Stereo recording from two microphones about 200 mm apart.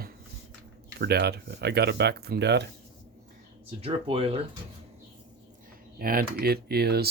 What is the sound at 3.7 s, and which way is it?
Speech, 30° right (ahead or behind).